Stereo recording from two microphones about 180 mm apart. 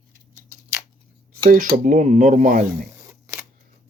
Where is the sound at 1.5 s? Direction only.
50° right (ahead or behind).